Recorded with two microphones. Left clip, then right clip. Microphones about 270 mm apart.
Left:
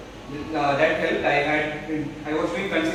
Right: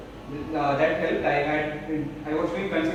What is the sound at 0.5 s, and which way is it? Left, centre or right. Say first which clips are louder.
A man's voice: left 2 dB; centre.